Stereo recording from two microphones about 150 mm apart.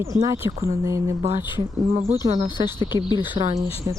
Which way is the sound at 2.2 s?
30° right (ahead or behind).